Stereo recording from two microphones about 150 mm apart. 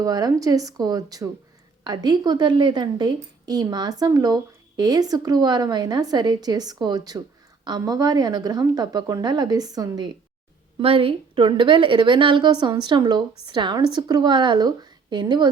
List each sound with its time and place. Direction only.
0.0 s speech: 25° right (ahead or behind)
10.8 s a woman's voice: 40° right (ahead or behind)